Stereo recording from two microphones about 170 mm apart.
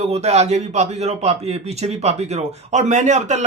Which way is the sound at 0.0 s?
40° right (ahead or behind).